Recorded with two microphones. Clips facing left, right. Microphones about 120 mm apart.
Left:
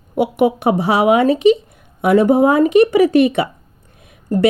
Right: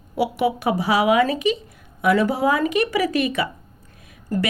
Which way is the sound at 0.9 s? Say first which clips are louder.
Left 4 dB; 25° left (ahead or behind).